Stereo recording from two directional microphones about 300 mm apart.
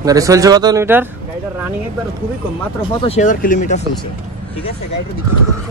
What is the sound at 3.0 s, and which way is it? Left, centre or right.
Speech, left.